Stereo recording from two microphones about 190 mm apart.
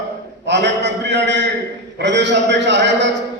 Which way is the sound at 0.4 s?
65° right (ahead or behind).